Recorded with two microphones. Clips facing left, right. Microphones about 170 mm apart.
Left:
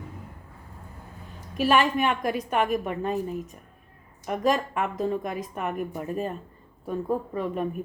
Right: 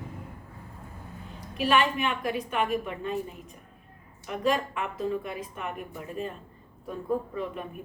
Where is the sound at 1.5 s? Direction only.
45° left (ahead or behind).